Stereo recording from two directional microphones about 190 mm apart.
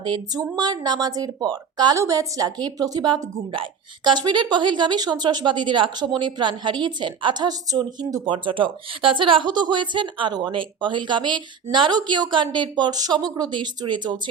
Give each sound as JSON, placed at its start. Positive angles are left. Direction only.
{"t": 0.0, "sound": "a woman's voice", "side_deg": -25}